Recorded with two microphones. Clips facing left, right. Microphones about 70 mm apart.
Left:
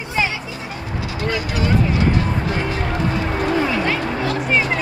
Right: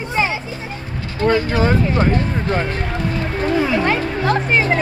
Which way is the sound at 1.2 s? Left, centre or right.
Right.